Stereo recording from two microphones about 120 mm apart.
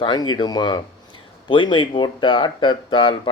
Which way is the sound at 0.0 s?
40° left (ahead or behind).